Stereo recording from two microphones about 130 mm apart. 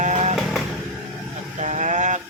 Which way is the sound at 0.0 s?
65° right (ahead or behind).